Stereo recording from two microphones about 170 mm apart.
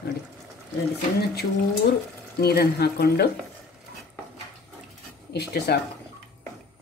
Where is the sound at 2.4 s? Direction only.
70° left (ahead or behind).